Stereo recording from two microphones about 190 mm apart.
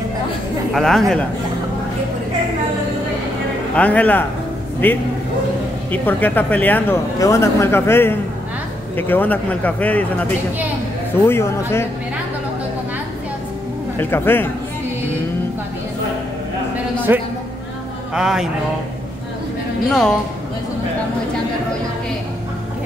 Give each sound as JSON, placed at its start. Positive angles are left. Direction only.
{"t": 0.7, "sound": "speech", "side_deg": 0}
{"t": 3.7, "sound": "speech", "side_deg": 10}
{"t": 11.2, "sound": "speech", "side_deg": 15}
{"t": 13.9, "sound": "speech", "side_deg": 10}
{"t": 17.1, "sound": "a man's voice", "side_deg": -10}
{"t": 19.9, "sound": "speech", "side_deg": 0}